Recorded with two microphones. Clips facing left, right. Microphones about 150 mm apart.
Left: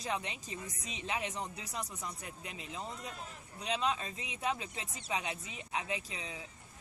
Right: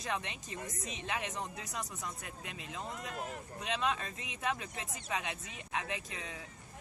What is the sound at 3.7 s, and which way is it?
Speech, 20° left (ahead or behind).